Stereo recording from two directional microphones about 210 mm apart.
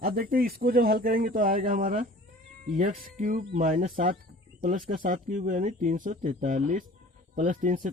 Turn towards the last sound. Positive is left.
turn(degrees=-40)  # may be behind; listen again after turning